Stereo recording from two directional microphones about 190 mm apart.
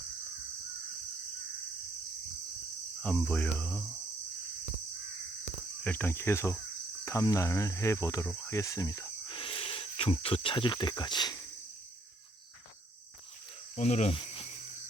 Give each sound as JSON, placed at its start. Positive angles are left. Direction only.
{"t": 3.0, "sound": "speech", "side_deg": 5}
{"t": 5.8, "sound": "cricket", "side_deg": 10}
{"t": 8.3, "sound": "speech", "side_deg": 15}
{"t": 13.7, "sound": "speech", "side_deg": 35}